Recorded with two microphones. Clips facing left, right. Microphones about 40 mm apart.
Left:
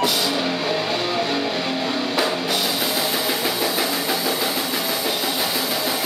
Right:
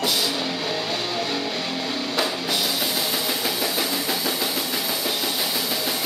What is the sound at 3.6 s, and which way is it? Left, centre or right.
Engine, centre.